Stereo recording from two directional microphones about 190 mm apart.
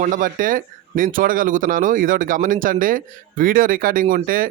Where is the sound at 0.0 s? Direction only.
45° right (ahead or behind).